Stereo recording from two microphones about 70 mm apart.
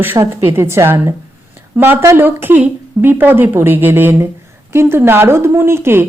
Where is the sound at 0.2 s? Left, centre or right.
Right.